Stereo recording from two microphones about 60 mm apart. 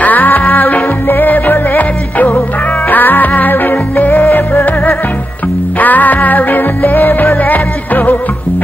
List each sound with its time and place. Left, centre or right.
0.0 s music: left
5.8 s music: left